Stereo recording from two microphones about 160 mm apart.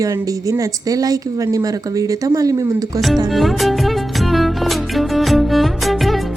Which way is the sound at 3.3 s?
Centre (ahead or behind).